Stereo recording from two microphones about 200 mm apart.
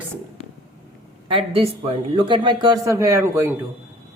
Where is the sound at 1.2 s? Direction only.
25° right (ahead or behind).